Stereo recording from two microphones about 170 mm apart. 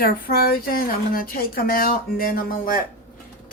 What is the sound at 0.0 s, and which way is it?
Speech, 65° left (ahead or behind).